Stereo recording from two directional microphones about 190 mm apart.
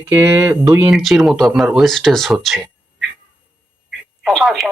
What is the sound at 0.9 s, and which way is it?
Speech, centre (ahead or behind).